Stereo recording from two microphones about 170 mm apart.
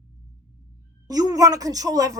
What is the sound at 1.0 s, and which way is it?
Speech, 20° right (ahead or behind).